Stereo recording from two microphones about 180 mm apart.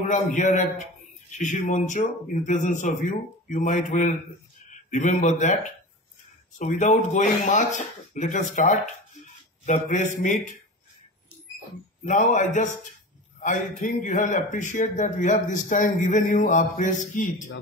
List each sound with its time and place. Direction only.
0.0 s a man's voice: 40° left (ahead or behind)
6.6 s a man's voice: 45° left (ahead or behind)
12.0 s a man's voice: 45° left (ahead or behind)